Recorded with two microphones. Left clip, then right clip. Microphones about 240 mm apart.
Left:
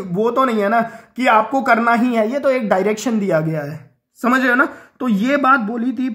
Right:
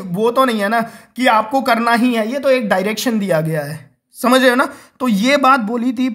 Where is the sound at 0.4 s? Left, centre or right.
Right.